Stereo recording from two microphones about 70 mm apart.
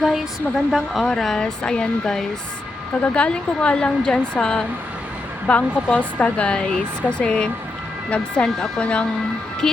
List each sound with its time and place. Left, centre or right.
0.0 s a woman's voice: centre